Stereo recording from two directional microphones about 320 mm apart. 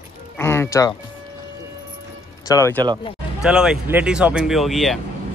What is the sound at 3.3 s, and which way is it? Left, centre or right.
Speech, centre.